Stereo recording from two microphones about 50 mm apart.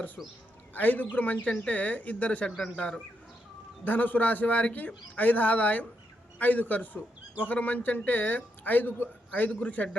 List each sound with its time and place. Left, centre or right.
0.2 s a man's voice: centre
0.7 s a man's voice: left
1.5 s speech: centre
1.7 s speech: left
3.8 s a man's voice: left